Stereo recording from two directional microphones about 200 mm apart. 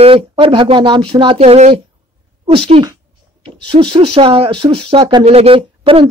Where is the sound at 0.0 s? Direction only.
25° right (ahead or behind).